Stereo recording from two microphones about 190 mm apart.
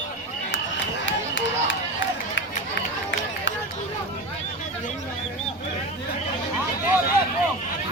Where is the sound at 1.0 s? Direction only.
75° left (ahead or behind).